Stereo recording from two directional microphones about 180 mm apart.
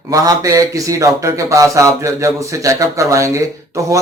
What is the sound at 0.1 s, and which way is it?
Speech, 20° right (ahead or behind).